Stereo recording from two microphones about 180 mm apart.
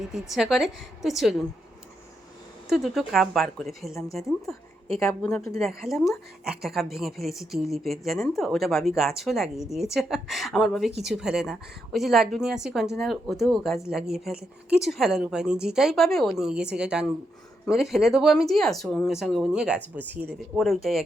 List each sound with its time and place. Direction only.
0.1 s a woman's voice: centre (ahead or behind)
2.6 s a woman's voice: centre (ahead or behind)
5.0 s a woman's voice: 15° left (ahead or behind)
5.5 s a woman's voice: centre (ahead or behind)